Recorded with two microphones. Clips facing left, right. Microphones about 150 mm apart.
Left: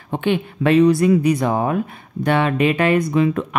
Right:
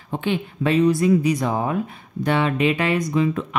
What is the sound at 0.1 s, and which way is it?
Speech, 60° left (ahead or behind).